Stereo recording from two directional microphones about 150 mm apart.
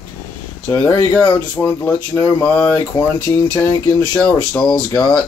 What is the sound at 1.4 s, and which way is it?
Speech, 10° left (ahead or behind).